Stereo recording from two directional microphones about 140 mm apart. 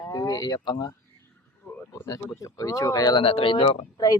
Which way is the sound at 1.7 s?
15° left (ahead or behind).